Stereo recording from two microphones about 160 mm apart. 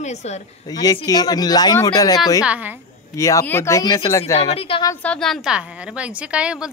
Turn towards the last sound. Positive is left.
turn(degrees=-5)  # may be behind; listen again after turning